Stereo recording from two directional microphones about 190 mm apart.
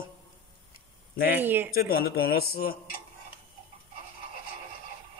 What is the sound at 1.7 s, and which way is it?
A woman's voice, 55° left (ahead or behind).